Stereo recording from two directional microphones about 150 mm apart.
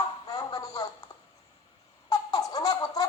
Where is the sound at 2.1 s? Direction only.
25° left (ahead or behind).